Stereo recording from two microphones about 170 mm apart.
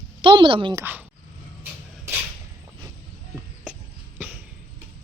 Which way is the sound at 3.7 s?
10° right (ahead or behind).